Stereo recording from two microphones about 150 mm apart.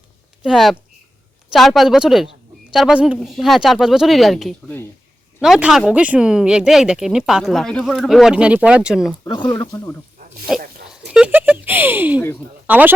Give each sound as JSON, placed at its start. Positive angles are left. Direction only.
{"t": 0.4, "sound": "speech", "side_deg": 0}
{"t": 9.2, "sound": "speech", "side_deg": 30}
{"t": 10.5, "sound": "speech", "side_deg": 0}